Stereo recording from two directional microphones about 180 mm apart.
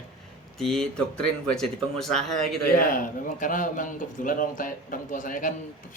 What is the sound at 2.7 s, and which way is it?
A man's voice, 50° left (ahead or behind).